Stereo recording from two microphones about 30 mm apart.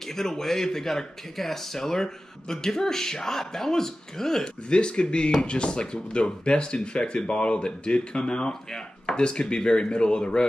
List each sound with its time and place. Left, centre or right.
0.1 s speech: centre
4.6 s speech: left